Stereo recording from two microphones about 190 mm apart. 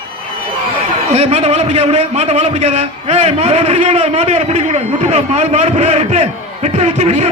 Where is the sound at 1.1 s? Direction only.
30° right (ahead or behind).